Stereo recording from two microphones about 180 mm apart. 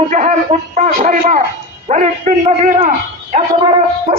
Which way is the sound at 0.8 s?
45° right (ahead or behind).